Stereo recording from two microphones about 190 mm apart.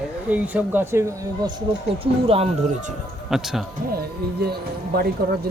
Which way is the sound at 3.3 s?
Centre (ahead or behind).